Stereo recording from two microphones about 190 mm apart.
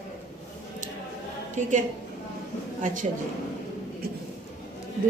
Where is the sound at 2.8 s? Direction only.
45° right (ahead or behind).